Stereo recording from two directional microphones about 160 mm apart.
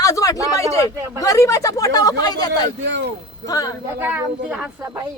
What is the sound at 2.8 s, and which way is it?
Speech, 90° right.